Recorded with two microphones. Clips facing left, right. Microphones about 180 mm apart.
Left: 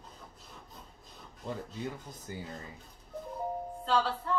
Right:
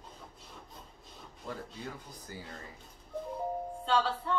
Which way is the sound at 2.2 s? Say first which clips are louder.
Left 4 dB; 20° left (ahead or behind).